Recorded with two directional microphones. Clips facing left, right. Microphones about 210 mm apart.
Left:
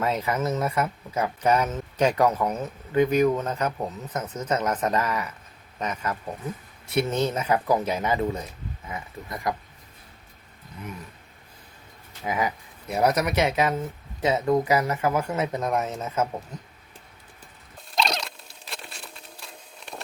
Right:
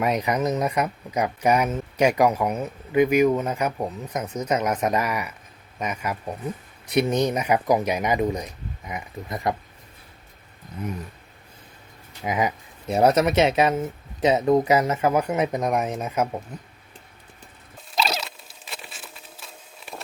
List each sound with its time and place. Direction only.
0.0 s speech: 15° right (ahead or behind)
12.2 s speech: 20° right (ahead or behind)
17.9 s patter: 5° right (ahead or behind)